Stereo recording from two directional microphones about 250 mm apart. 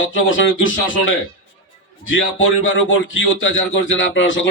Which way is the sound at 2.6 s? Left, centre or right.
Left.